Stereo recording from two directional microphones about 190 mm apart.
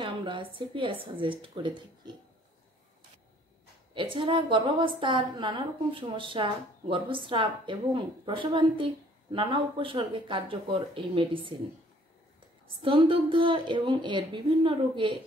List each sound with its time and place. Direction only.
0.0 s a woman's voice: 25° right (ahead or behind)
3.9 s a woman's voice: 25° right (ahead or behind)
12.8 s a woman's voice: 25° right (ahead or behind)